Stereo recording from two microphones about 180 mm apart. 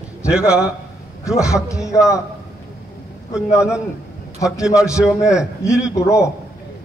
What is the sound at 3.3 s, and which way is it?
Speech, 15° left (ahead or behind).